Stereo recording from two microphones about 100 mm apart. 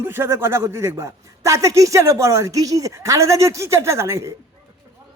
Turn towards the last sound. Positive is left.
turn(degrees=-30)  # may be behind; listen again after turning